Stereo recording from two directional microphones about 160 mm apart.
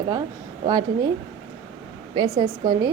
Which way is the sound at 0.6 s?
30° right (ahead or behind).